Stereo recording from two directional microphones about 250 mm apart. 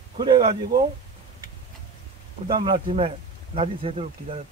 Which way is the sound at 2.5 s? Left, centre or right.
Centre.